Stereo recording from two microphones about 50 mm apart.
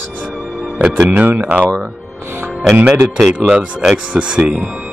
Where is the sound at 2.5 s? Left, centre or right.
Centre.